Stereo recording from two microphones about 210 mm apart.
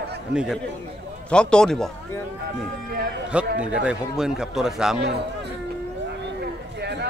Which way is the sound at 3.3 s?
5° right (ahead or behind).